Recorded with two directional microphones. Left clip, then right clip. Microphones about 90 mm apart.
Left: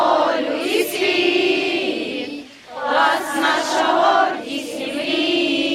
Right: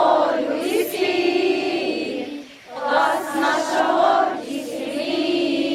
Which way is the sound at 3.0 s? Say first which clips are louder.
Left 5 dB; 25° left (ahead or behind).